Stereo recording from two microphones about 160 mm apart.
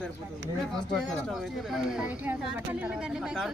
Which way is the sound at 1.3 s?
Centre (ahead or behind).